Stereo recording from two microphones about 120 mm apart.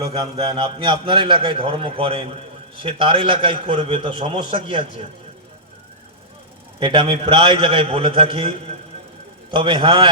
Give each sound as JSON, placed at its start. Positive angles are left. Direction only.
{"t": 0.4, "sound": "a man's voice", "side_deg": -35}
{"t": 6.7, "sound": "a man's voice", "side_deg": -40}